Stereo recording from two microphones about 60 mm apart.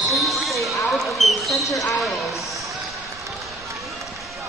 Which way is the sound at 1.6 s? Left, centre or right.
Left.